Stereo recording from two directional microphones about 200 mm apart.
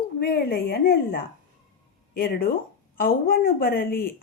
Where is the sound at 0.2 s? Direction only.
50° left (ahead or behind).